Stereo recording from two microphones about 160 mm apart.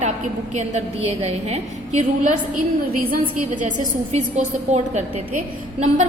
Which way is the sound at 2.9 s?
65° right (ahead or behind).